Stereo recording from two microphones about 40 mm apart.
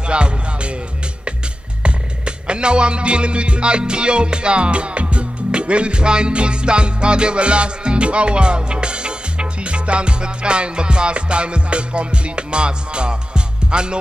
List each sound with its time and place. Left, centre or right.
0.0 s music: right
1.8 s music: right